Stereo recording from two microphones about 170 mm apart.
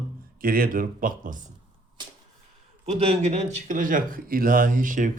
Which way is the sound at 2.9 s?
40° right (ahead or behind).